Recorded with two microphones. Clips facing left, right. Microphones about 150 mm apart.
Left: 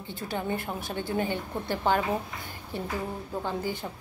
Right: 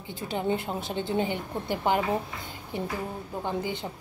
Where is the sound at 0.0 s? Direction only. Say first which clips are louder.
Right 2 dB; 20° right (ahead or behind).